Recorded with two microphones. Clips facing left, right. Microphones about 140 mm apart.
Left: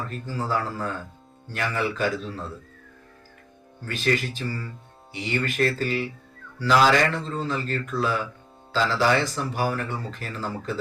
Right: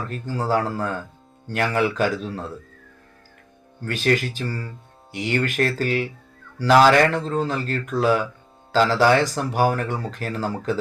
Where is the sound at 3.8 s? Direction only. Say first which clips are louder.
Right 4 dB; 65° right (ahead or behind).